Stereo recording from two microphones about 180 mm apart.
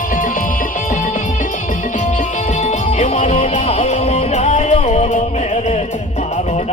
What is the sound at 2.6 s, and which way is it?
Music, 40° left (ahead or behind).